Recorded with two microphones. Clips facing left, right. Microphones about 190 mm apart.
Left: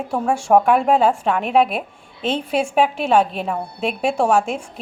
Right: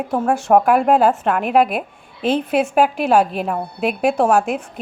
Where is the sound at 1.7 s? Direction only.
5° right (ahead or behind).